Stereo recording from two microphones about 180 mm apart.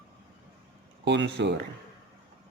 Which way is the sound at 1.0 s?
75° right (ahead or behind).